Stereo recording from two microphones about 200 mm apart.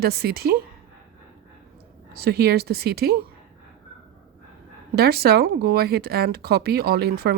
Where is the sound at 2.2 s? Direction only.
55° right (ahead or behind).